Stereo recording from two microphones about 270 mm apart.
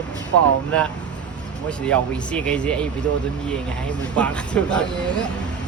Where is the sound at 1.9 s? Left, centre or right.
Centre.